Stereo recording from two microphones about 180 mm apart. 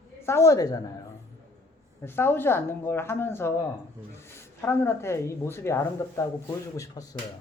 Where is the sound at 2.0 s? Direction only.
10° left (ahead or behind).